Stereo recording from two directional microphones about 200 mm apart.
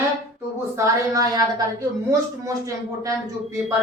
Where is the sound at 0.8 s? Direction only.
15° right (ahead or behind).